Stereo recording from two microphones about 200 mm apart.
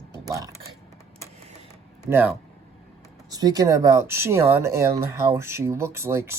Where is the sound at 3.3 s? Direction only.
20° right (ahead or behind).